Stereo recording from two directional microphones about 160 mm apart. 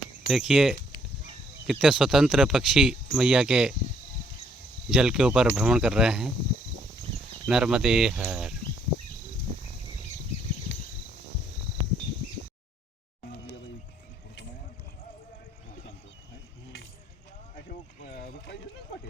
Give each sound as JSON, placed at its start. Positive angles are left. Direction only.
{"t": 0.3, "sound": "speech", "side_deg": 0}
{"t": 4.9, "sound": "speech", "side_deg": -5}
{"t": 7.4, "sound": "speech", "side_deg": -5}
{"t": 18.0, "sound": "a sound", "side_deg": 80}